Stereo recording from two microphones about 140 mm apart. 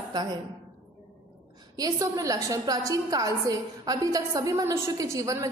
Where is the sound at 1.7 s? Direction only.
25° right (ahead or behind).